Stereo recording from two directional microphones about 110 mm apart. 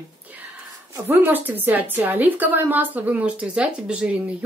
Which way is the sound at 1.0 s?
20° right (ahead or behind).